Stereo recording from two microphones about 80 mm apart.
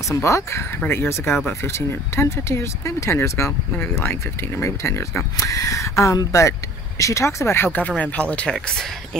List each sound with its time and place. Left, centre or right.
0.1 s speech: left
5.4 s speech: left; by 9.2 s centre